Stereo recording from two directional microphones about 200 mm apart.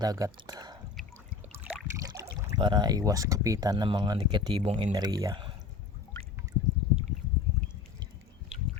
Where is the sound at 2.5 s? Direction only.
20° right (ahead or behind).